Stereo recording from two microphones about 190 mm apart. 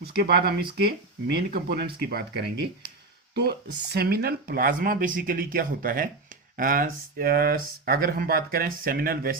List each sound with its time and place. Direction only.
0.0 s speech: 55° right (ahead or behind)